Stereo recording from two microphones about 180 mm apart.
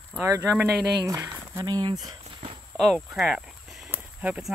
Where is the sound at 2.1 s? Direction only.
30° right (ahead or behind).